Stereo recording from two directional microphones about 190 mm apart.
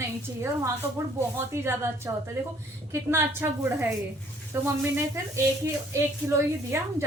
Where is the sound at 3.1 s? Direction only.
10° right (ahead or behind).